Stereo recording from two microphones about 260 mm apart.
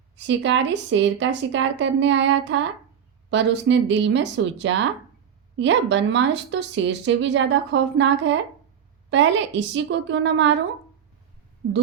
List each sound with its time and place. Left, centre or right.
0.2 s a woman's voice: right